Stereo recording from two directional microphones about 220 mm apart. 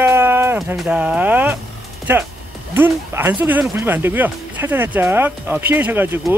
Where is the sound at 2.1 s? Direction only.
10° right (ahead or behind).